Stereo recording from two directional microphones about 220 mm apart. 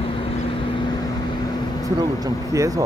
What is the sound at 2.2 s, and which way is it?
Speech, 15° right (ahead or behind).